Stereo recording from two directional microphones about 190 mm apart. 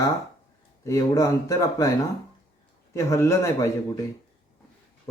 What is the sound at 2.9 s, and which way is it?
Speech, 15° left (ahead or behind).